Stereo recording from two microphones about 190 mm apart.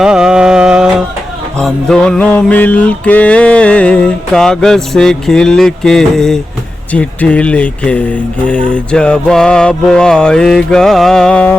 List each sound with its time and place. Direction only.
0.0 s music: 5° right (ahead or behind)